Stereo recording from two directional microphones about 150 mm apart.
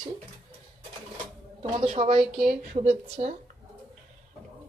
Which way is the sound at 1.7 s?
45° right (ahead or behind).